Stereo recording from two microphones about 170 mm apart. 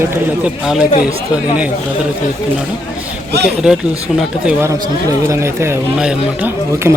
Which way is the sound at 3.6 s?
5° right (ahead or behind).